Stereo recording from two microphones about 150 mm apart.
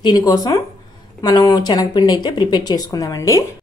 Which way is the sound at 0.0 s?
25° left (ahead or behind).